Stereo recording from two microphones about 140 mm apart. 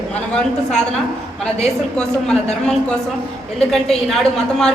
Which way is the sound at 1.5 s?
5° left (ahead or behind).